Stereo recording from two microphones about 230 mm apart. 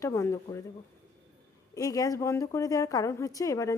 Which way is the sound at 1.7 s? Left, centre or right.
Centre.